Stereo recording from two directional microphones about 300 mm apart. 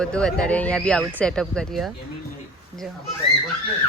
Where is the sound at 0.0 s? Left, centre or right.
Centre.